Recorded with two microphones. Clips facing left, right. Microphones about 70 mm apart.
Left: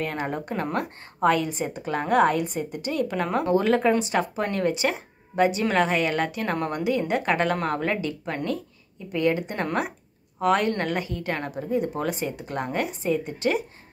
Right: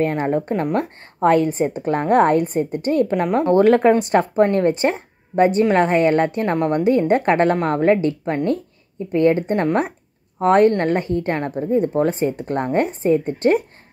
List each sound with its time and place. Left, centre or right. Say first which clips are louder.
0.0 s a woman's voice: right 9 dB; right
3.4 s a woman's voice: right 8 dB; right
6.4 s speech: right 7 dB; right
6.7 s a woman's voice: right 10 dB; right
7.5 s a woman's voice: right 9 dB; right